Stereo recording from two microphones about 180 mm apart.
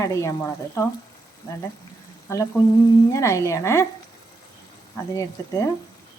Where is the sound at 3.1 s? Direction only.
15° left (ahead or behind).